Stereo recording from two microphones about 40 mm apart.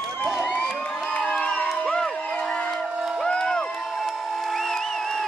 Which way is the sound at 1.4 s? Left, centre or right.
Left.